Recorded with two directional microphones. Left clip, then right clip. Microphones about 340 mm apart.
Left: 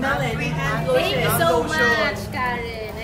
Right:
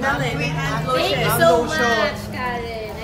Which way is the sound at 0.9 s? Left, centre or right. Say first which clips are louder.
Right 1 dB; centre.